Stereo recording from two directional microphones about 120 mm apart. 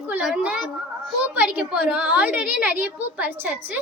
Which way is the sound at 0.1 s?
5° right (ahead or behind).